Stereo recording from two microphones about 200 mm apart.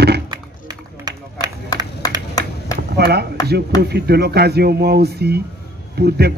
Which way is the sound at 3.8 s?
55° right (ahead or behind).